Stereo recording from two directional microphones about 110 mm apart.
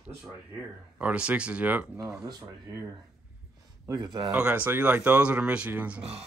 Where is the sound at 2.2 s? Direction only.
30° right (ahead or behind).